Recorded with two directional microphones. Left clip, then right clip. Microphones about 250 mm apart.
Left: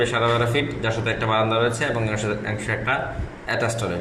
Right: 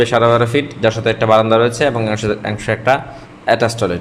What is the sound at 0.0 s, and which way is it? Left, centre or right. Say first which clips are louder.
A man's voice: right 8 dB; right.